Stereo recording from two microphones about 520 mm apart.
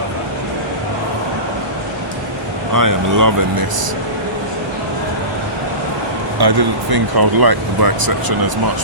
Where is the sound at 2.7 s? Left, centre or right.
Right.